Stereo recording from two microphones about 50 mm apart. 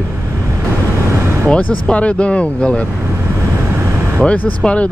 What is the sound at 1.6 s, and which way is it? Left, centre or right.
Speech, left.